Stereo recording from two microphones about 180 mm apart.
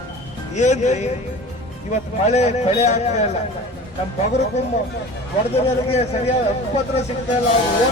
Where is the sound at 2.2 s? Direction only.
35° left (ahead or behind).